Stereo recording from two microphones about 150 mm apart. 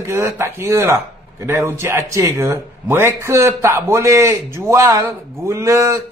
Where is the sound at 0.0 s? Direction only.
20° right (ahead or behind).